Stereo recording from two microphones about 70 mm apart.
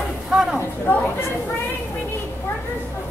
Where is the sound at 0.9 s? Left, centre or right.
Left.